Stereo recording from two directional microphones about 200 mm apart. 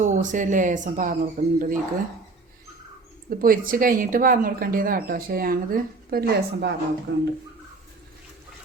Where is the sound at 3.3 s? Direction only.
45° right (ahead or behind).